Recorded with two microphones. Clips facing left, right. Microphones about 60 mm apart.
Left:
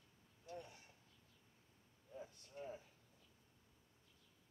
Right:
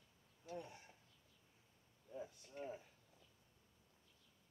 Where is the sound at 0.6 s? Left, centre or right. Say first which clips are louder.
Right 3 dB; right.